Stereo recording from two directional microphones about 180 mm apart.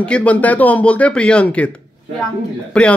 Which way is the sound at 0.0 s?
5° left (ahead or behind).